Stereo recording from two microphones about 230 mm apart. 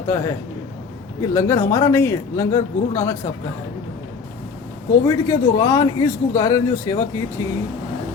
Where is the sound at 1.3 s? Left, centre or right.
Centre.